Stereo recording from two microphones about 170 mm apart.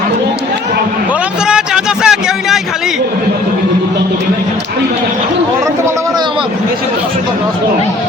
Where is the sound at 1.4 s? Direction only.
5° right (ahead or behind).